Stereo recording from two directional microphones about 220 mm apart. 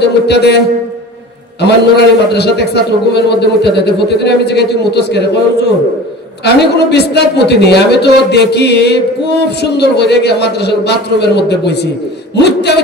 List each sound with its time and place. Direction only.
0.0 s a man's voice: 50° left (ahead or behind)
6.4 s a man's voice: 50° left (ahead or behind)